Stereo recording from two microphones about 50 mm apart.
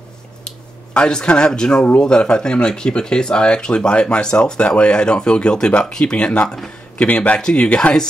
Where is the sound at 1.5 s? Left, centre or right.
Centre.